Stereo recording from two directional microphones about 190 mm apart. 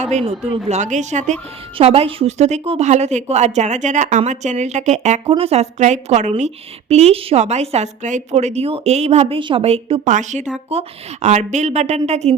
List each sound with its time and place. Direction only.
0.0 s a woman's voice: 35° right (ahead or behind)